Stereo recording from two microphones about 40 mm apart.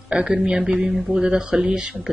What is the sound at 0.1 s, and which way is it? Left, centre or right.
A man's voice, right.